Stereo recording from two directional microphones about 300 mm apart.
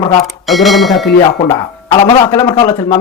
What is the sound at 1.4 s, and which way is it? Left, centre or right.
Speech, centre.